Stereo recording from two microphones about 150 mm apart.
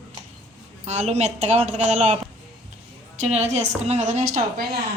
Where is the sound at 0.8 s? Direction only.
50° right (ahead or behind).